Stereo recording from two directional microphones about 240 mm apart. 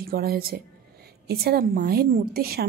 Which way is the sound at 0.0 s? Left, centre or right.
Right.